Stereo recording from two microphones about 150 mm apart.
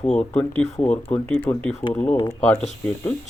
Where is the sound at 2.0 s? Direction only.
20° left (ahead or behind).